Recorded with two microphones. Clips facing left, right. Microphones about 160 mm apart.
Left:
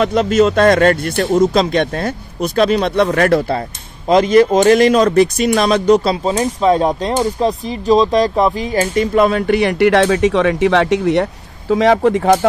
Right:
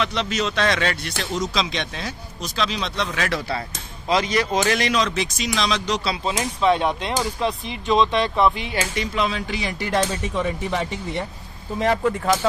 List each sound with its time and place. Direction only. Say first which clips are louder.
0.0 s speech: left 12 dB; 50° left (ahead or behind)
6.3 s speech: left 4 dB; 35° left (ahead or behind); by 11.2 s 80° left
11.7 s speech: left 9 dB; 90° left; by 12.4 s 65° left (ahead or behind)